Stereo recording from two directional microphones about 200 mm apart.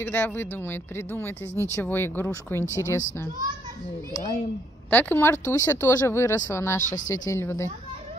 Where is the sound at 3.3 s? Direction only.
20° right (ahead or behind).